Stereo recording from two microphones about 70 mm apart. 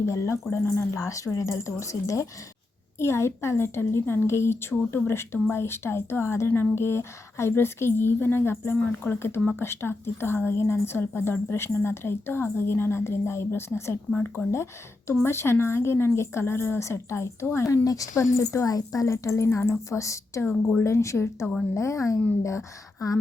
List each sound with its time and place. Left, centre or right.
0.0 s a woman's voice: left
0.9 s a woman's voice: left
20.4 s speech: left
20.8 s a woman's voice: left